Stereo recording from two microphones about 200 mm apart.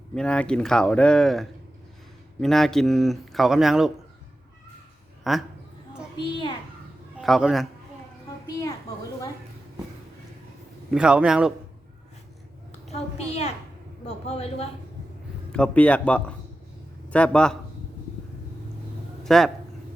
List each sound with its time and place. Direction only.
0.1 s a man's voice: 5° left (ahead or behind)
5.3 s a man's voice: centre (ahead or behind)
7.2 s a man's voice: centre (ahead or behind)
8.4 s a child's voice: 20° left (ahead or behind)
10.9 s a man's voice: 5° right (ahead or behind)
12.9 s a child's voice: 30° left (ahead or behind)
15.5 s a man's voice: 5° left (ahead or behind)
19.2 s a man's voice: centre (ahead or behind)